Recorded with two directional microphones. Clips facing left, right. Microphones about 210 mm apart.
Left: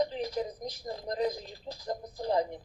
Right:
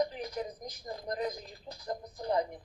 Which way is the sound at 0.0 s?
30° left (ahead or behind).